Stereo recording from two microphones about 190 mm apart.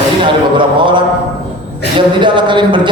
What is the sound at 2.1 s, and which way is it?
Speech, 25° right (ahead or behind).